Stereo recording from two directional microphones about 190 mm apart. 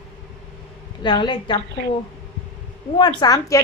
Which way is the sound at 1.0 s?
25° left (ahead or behind).